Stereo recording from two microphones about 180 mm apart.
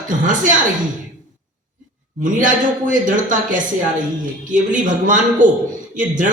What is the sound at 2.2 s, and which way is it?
Speech, 45° right (ahead or behind).